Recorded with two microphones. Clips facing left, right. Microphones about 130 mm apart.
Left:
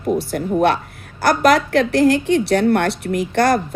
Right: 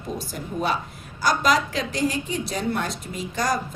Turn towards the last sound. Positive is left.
turn(degrees=70)  # may be behind; listen again after turning